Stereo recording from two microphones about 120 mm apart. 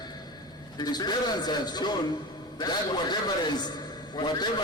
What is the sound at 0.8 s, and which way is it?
A man's voice, 35° left (ahead or behind).